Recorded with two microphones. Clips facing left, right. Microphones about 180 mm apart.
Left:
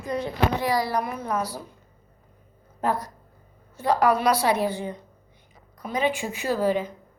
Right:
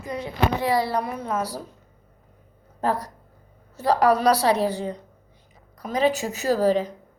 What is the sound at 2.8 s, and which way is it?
Speech, 35° right (ahead or behind).